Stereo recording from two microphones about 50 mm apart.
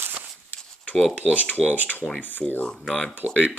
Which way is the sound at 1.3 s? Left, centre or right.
Left.